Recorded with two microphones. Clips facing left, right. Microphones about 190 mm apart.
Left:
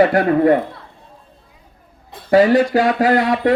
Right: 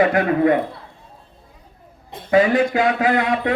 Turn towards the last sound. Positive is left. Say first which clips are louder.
# left 4 dB
turn(degrees=40)  # may be behind; listen again after turning